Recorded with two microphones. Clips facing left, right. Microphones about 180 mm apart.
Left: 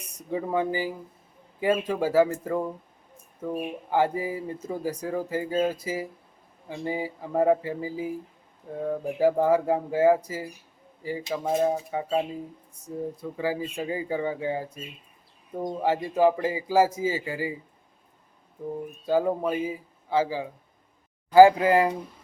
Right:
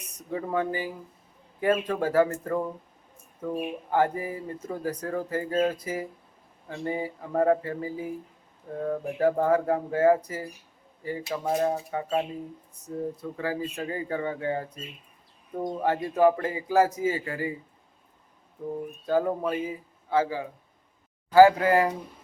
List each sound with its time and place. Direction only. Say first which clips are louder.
0.3 s speech: left 2 dB; 10° left (ahead or behind)
19.0 s speech: left 1 dB; 10° left (ahead or behind)